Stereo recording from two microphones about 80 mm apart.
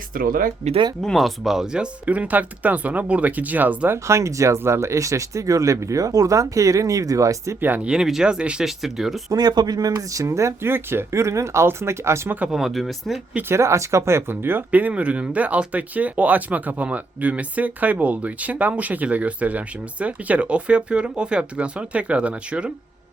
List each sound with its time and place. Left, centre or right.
1.0 s speech: centre; by 3.9 s right
3.9 s speech: right
7.9 s speech: centre
9.3 s speech: right
12.5 s speech: centre
13.5 s speech: right; by 22.7 s centre